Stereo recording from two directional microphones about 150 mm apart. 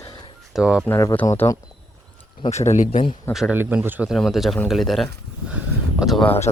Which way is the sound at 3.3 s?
Centre (ahead or behind).